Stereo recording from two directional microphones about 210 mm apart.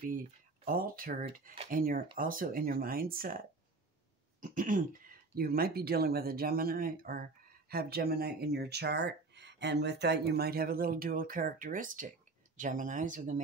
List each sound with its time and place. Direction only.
0.7 s speech: 40° right (ahead or behind)